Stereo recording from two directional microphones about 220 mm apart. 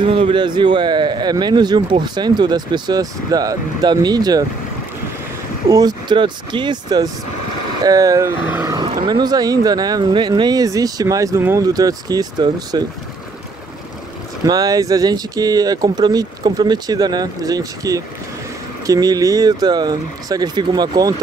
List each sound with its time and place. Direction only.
0.0 s a man's voice: 25° right (ahead or behind)
5.7 s a man's voice: 15° right (ahead or behind)
14.4 s speech: 15° right (ahead or behind)